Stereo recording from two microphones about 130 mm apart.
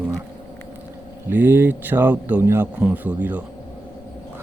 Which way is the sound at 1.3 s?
15° right (ahead or behind).